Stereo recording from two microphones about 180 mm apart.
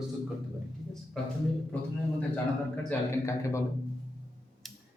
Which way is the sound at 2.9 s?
15° left (ahead or behind).